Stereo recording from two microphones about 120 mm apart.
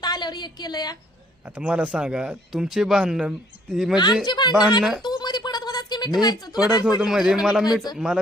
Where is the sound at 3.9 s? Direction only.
35° left (ahead or behind).